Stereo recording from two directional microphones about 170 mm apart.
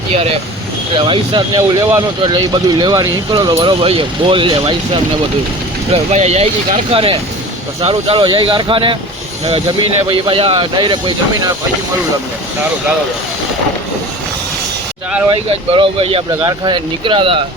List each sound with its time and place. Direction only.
0.1 s speech: 35° right (ahead or behind)
5.9 s speech: 40° right (ahead or behind)
10.1 s speech: 30° right (ahead or behind)
15.4 s speech: 35° right (ahead or behind)